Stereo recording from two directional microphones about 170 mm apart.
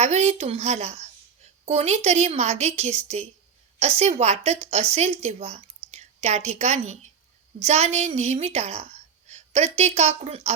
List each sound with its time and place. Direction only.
0.0 s a woman's voice: 40° right (ahead or behind)